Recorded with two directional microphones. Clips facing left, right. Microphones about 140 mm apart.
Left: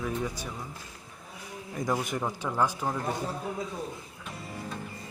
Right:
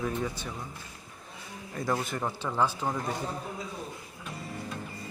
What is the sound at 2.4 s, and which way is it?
Speech, 5° left (ahead or behind).